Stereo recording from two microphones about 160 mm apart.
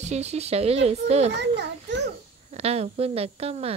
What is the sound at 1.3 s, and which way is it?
Speech, 90° right.